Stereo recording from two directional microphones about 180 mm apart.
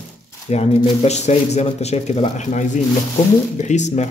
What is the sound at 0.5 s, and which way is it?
Speech, 35° left (ahead or behind).